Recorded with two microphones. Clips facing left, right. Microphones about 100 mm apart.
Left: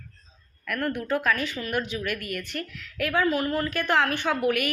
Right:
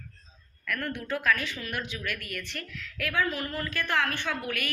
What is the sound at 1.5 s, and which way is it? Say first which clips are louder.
Speech: left 5 dB; centre (ahead or behind).